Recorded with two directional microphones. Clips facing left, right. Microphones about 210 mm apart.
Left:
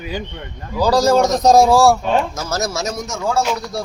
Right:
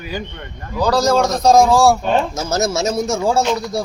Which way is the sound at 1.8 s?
Centre (ahead or behind).